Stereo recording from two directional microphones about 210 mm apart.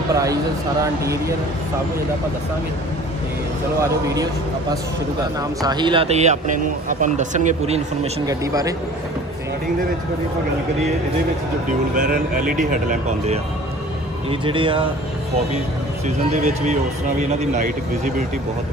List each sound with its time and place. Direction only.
0.1 s a man's voice: 15° right (ahead or behind)
3.8 s a man's voice: 15° right (ahead or behind)
8.3 s a man's voice: 15° right (ahead or behind)
11.9 s speech: 40° right (ahead or behind)
14.3 s speech: 25° right (ahead or behind)
16.3 s speech: 35° right (ahead or behind)